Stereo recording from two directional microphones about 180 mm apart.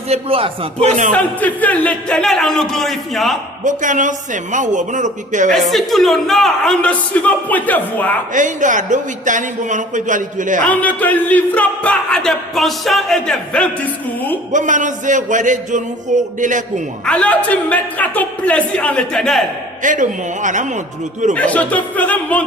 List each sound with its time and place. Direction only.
0.1 s speech: 30° right (ahead or behind)
1.1 s a woman's voice: 10° left (ahead or behind)
3.6 s speech: 45° right (ahead or behind)
5.5 s a woman's voice: centre (ahead or behind)
8.3 s speech: 45° right (ahead or behind)
10.6 s speech: 10° left (ahead or behind)
14.5 s speech: 45° right (ahead or behind)
17.1 s speech: 5° left (ahead or behind)
19.8 s speech: 45° right (ahead or behind)
21.3 s speech: 10° left (ahead or behind)